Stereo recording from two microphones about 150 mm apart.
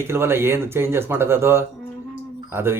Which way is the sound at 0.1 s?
15° right (ahead or behind).